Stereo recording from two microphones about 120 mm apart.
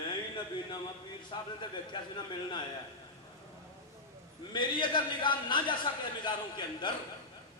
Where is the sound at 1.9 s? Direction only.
40° left (ahead or behind).